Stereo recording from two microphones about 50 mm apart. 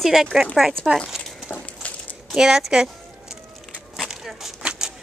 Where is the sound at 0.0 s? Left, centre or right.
Centre.